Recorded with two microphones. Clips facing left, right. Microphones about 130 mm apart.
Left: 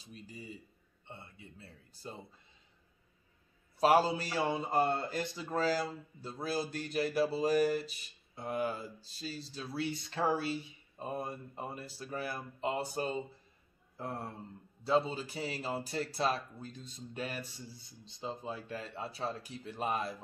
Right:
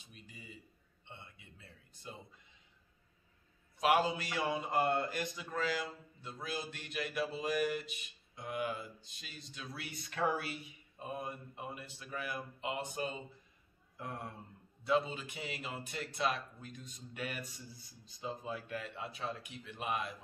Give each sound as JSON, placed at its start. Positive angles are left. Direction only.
{"t": 0.0, "sound": "a man's voice", "side_deg": 35}
{"t": 3.7, "sound": "a man's voice", "side_deg": 35}